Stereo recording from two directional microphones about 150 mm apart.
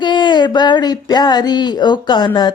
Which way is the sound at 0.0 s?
30° left (ahead or behind).